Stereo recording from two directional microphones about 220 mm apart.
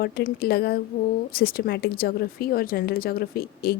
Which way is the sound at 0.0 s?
40° left (ahead or behind).